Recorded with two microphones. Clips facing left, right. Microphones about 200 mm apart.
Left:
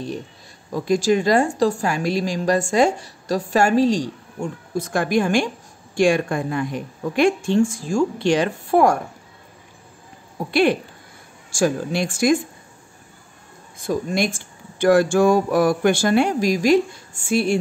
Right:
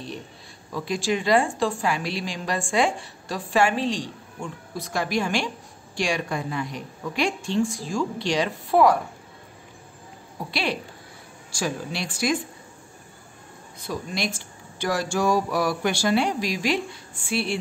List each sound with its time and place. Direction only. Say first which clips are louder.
0.7 s a woman's voice: left 7 dB; 45° left (ahead or behind)
10.5 s a woman's voice: left 11 dB; 55° left (ahead or behind)
13.8 s a woman's voice: left 8 dB; 50° left (ahead or behind)